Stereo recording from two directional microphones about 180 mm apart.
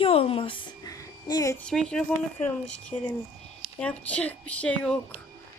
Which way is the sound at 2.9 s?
15° left (ahead or behind).